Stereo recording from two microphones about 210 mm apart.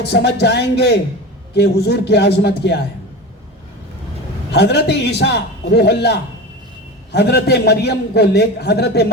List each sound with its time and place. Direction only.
0.0 s a man's voice: 50° left (ahead or behind)
4.5 s a man's voice: 50° left (ahead or behind)